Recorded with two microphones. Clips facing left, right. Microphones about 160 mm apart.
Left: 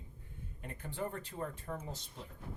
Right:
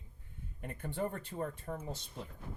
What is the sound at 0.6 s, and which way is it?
Speech, 50° right (ahead or behind).